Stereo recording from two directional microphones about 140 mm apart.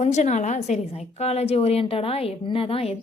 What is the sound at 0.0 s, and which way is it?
A woman's voice, 55° left (ahead or behind).